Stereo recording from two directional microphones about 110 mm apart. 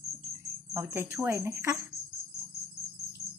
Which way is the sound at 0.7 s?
25° right (ahead or behind).